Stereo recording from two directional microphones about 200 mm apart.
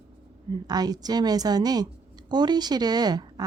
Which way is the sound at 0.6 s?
20° right (ahead or behind).